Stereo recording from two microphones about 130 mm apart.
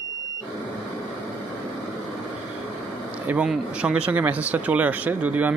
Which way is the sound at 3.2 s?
10° right (ahead or behind).